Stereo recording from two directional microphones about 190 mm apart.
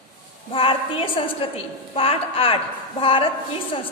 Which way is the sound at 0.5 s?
30° left (ahead or behind).